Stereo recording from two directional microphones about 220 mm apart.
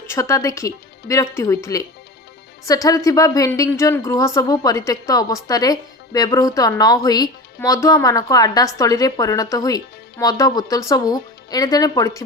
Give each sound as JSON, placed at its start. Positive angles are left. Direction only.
{"t": 0.1, "sound": "a woman's voice", "side_deg": 15}